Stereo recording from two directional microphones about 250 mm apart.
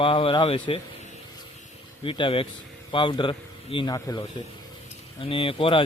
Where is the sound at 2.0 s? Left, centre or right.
Left.